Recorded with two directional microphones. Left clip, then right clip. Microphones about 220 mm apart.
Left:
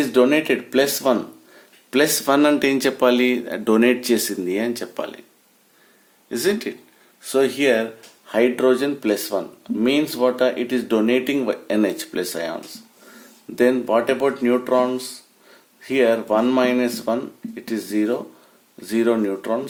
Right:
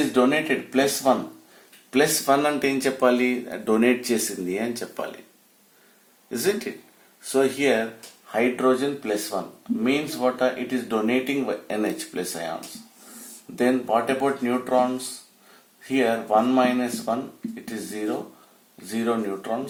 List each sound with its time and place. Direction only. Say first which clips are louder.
0.1 s speech: left 4 dB; 50° left (ahead or behind)
6.3 s speech: left 3 dB; 35° left (ahead or behind)
13.6 s speech: left 4 dB; 50° left (ahead or behind)